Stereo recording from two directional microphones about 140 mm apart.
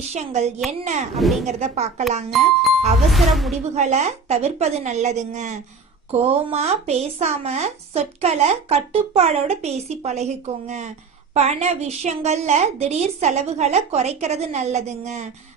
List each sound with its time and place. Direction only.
0.1 s a woman's voice: 50° right (ahead or behind)
1.2 s speech: centre (ahead or behind)
1.5 s speech: 55° right (ahead or behind)
2.3 s speech: centre (ahead or behind)
3.8 s a woman's voice: 55° right (ahead or behind)
6.1 s speech: 50° right (ahead or behind)